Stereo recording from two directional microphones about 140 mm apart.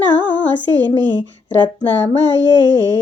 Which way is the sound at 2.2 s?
30° right (ahead or behind).